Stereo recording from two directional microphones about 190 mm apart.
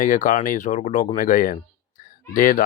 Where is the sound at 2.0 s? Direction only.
45° left (ahead or behind).